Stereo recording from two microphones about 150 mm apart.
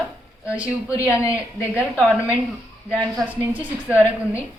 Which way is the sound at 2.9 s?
10° right (ahead or behind).